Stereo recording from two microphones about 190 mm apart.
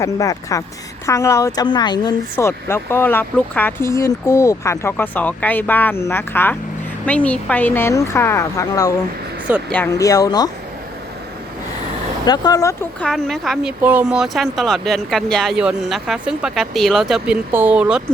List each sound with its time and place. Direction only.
0.0 s a woman's voice: 15° left (ahead or behind)
9.5 s speech: 5° left (ahead or behind)
12.2 s a woman's voice: 20° left (ahead or behind)
13.0 s speech: 5° left (ahead or behind)